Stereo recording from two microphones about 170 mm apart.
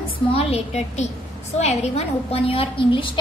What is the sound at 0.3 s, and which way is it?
A woman's voice, 35° left (ahead or behind).